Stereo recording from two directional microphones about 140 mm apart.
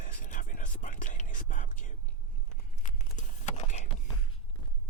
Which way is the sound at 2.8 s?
60° left (ahead or behind).